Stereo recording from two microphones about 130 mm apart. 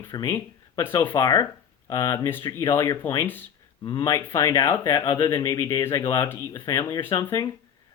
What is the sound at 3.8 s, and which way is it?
Speech, 35° left (ahead or behind).